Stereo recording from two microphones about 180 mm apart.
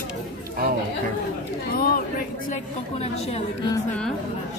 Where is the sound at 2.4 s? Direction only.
40° left (ahead or behind).